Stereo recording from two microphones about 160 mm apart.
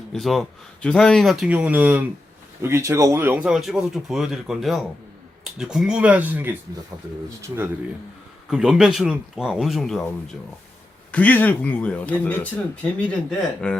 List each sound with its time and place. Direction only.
0.1 s speech: centre (ahead or behind)
3.5 s speech: centre (ahead or behind)
8.4 s speech: 5° right (ahead or behind)
11.1 s speech: 10° left (ahead or behind)